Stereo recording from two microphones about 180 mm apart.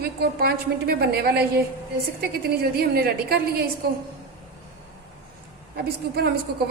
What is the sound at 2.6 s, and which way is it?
A woman's voice, 60° right (ahead or behind).